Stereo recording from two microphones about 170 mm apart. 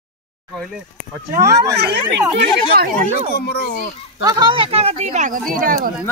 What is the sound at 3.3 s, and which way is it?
Speech, 70° left (ahead or behind).